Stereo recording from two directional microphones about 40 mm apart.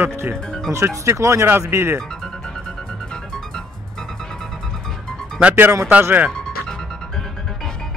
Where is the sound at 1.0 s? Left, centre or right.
Right.